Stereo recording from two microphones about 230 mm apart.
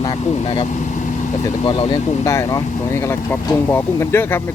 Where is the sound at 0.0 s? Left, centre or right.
Left.